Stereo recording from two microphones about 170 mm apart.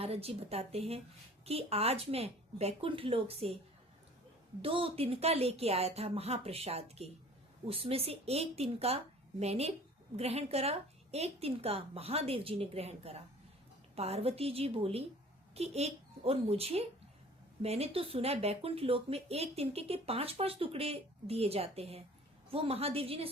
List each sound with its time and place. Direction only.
0.0 s speech: 35° right (ahead or behind)
4.6 s speech: 35° right (ahead or behind)